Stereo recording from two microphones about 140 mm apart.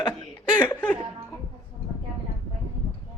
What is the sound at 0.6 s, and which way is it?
Speech, 10° left (ahead or behind).